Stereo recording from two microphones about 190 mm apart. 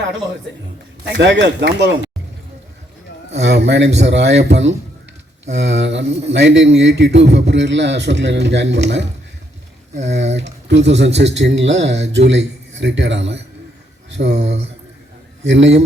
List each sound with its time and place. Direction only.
1.0 s a man's voice: 65° right (ahead or behind)
3.3 s a man's voice: 65° right (ahead or behind)
10.2 s a man's voice: 70° right (ahead or behind)
15.4 s a man's voice: 70° right (ahead or behind)